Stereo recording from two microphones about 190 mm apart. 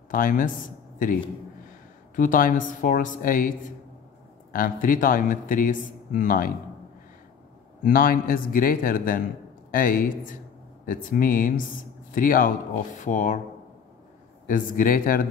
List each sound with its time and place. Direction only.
0.1 s speech: 45° left (ahead or behind)
2.1 s speech: 45° left (ahead or behind)
7.8 s speech: 50° left (ahead or behind)
14.5 s speech: 45° left (ahead or behind)